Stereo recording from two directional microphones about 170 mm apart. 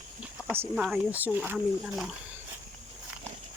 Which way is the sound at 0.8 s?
5° right (ahead or behind).